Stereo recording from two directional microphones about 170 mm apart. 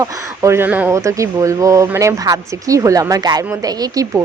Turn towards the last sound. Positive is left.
turn(degrees=-20)  # may be behind; listen again after turning